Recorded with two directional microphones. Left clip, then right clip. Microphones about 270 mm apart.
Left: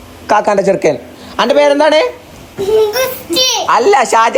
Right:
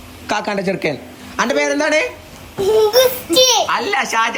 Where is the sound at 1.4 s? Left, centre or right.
Right.